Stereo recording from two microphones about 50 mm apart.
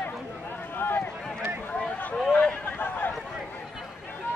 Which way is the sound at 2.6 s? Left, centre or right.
Left.